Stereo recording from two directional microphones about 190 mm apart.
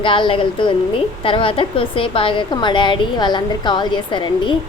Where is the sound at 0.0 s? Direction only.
25° left (ahead or behind).